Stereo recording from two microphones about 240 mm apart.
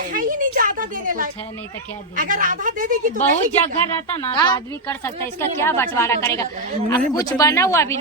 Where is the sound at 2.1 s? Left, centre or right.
Right.